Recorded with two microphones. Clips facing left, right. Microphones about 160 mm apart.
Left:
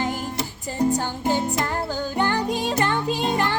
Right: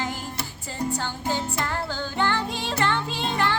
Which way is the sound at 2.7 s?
15° left (ahead or behind).